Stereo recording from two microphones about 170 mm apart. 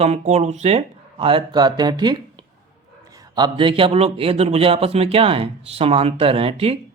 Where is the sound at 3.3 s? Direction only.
25° right (ahead or behind).